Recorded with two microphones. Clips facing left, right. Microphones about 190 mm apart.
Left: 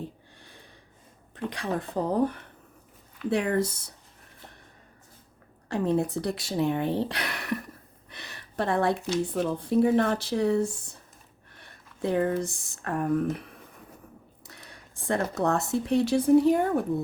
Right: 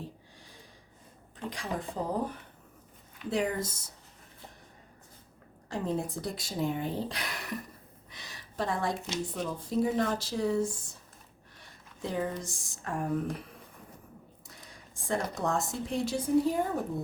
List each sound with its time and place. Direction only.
0.3 s a sound: 60° left (ahead or behind)
1.5 s speech: 65° left (ahead or behind)
5.6 s speech: 65° left (ahead or behind)
14.4 s speech: 65° left (ahead or behind)